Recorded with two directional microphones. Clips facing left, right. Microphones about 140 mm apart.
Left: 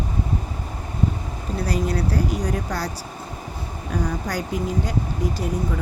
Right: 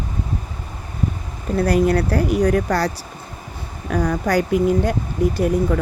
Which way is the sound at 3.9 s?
75° right (ahead or behind).